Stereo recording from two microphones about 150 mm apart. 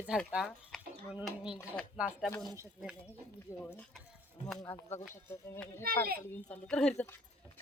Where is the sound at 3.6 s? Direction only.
10° left (ahead or behind).